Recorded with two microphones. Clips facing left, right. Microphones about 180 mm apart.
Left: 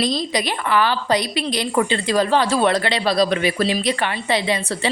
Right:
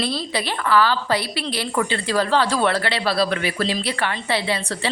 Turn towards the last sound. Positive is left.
turn(degrees=15)  # may be behind; listen again after turning